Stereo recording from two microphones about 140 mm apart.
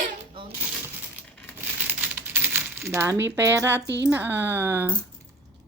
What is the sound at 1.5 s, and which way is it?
Speech, 15° right (ahead or behind).